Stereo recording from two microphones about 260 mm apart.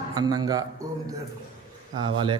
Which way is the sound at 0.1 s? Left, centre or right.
Centre.